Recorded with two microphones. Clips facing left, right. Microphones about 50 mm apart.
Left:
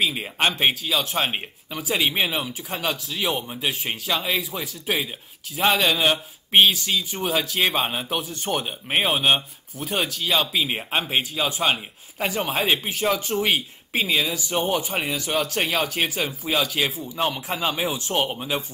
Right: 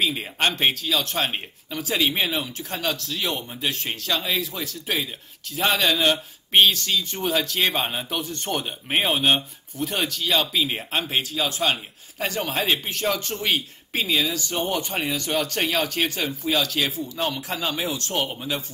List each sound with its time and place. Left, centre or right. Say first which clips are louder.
0.0 s speech: left 1 dB; centre